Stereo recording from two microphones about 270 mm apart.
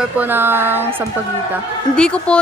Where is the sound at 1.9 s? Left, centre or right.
Centre.